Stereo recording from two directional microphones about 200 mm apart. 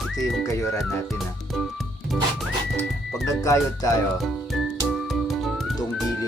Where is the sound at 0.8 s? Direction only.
5° left (ahead or behind).